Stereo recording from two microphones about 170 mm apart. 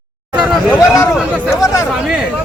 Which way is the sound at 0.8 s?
20° left (ahead or behind).